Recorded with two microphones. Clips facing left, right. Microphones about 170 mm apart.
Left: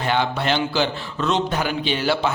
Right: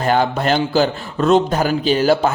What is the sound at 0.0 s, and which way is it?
A man's voice, 45° right (ahead or behind).